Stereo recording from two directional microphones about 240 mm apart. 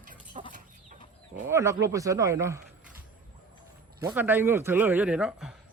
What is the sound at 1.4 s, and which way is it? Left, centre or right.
A man's voice, centre.